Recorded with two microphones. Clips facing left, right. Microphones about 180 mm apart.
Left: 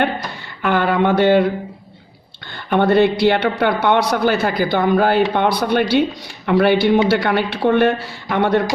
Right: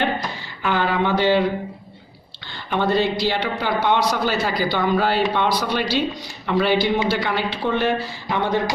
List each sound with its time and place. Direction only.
0.6 s speech: 60° left (ahead or behind)
2.5 s a man's voice: 55° left (ahead or behind)